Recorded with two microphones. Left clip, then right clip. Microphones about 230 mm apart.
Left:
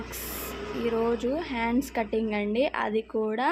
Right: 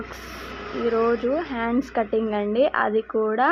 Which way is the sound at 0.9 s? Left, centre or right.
Centre.